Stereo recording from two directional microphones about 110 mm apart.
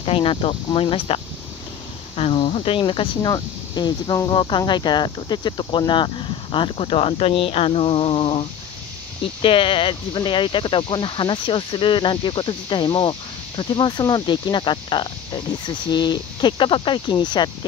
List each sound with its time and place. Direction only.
0.0 s speech: 60° left (ahead or behind); by 17.5 s 40° left (ahead or behind)